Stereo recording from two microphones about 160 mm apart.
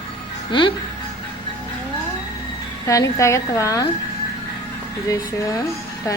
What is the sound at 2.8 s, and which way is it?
A woman's voice, 20° left (ahead or behind).